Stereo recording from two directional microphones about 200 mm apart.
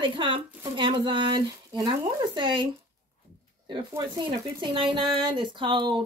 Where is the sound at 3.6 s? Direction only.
20° right (ahead or behind).